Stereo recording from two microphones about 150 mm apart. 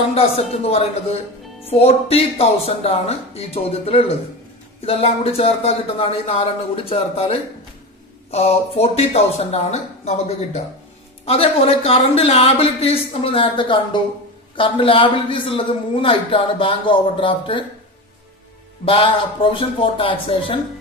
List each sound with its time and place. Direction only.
0.1 s a man's voice: 45° left (ahead or behind)
18.9 s a man's voice: 35° left (ahead or behind)